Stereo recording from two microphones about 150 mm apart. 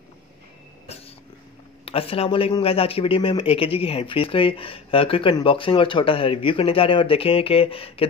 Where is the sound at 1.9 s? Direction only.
40° left (ahead or behind).